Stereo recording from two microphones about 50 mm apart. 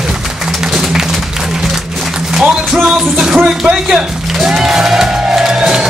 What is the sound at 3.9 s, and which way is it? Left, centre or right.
Music, centre.